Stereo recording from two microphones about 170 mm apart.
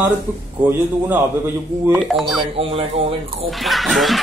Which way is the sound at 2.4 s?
35° right (ahead or behind).